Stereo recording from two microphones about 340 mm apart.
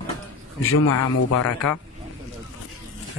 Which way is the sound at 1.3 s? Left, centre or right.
Left.